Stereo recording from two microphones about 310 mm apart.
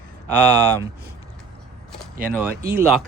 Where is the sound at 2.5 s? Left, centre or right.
Right.